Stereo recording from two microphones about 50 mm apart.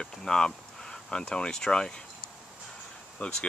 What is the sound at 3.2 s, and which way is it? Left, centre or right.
Speech, left.